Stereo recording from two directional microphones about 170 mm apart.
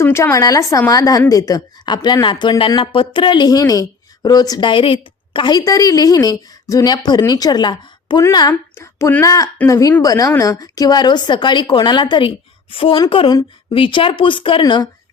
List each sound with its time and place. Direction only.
0.0 s speech: 15° left (ahead or behind)